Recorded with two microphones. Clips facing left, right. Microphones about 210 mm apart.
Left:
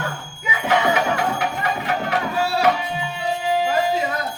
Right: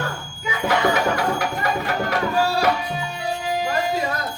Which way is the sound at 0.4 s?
40° right (ahead or behind).